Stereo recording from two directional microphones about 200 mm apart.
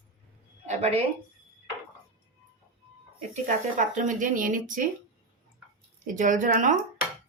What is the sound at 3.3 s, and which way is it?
Speech, 40° right (ahead or behind).